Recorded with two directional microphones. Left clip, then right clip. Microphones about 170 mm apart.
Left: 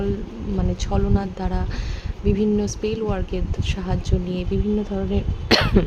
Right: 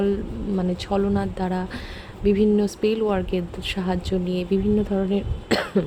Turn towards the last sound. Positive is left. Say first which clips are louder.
# left 4 dB
turn(degrees=5)  # may be behind; listen again after turning